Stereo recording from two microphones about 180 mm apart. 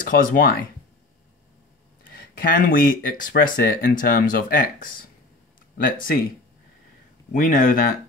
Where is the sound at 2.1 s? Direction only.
55° left (ahead or behind).